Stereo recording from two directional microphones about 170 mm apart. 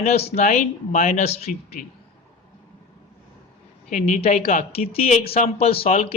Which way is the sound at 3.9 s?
40° left (ahead or behind).